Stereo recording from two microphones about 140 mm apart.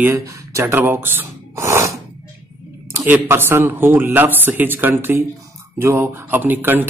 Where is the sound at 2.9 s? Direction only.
15° right (ahead or behind).